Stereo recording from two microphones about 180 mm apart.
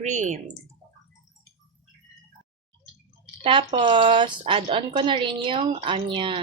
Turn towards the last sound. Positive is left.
turn(degrees=-30)  # may be behind; listen again after turning